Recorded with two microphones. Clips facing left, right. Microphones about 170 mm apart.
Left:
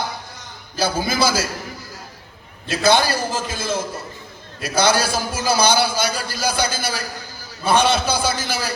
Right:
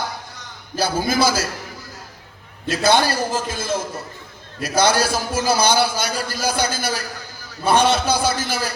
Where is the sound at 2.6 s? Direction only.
50° right (ahead or behind).